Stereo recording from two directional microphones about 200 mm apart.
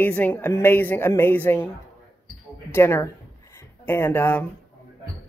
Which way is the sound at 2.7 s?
10° left (ahead or behind).